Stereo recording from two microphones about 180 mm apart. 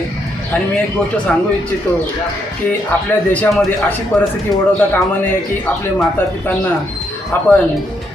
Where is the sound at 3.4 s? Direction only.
10° left (ahead or behind).